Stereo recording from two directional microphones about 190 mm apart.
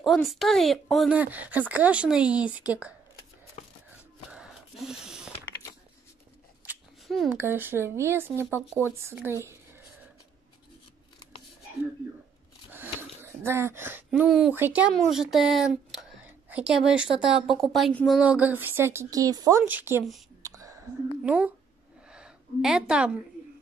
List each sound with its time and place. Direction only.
0.0 s speech: centre (ahead or behind)
4.3 s a sound: 5° right (ahead or behind)
7.1 s speech: centre (ahead or behind)
7.3 s speech: 10° right (ahead or behind)
12.7 s a woman's voice: 10° right (ahead or behind)
20.4 s whispering: 15° right (ahead or behind)
21.2 s speech: 5° right (ahead or behind)
22.0 s a sound: 5° right (ahead or behind)